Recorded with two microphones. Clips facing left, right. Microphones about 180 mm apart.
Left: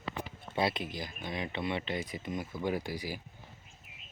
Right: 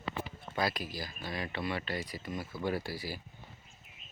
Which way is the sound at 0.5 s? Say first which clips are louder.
Left 2 dB; 25° left (ahead or behind).